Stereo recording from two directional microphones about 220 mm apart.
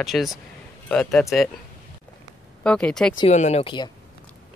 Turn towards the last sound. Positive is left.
turn(degrees=20)  # may be behind; listen again after turning